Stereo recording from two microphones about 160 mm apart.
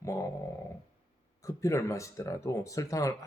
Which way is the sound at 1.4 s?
20° left (ahead or behind).